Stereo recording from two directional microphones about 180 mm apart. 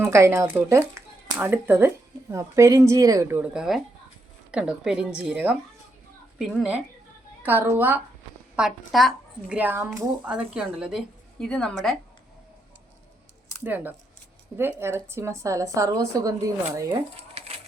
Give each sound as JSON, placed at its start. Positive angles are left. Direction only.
{"t": 0.0, "sound": "a woman's voice", "side_deg": -15}
{"t": 13.7, "sound": "a woman's voice", "side_deg": -10}